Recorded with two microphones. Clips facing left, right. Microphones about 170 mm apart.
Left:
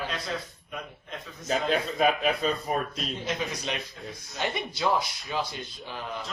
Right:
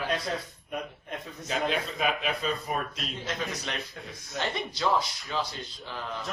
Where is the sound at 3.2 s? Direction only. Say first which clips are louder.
Left 1 dB; 15° left (ahead or behind).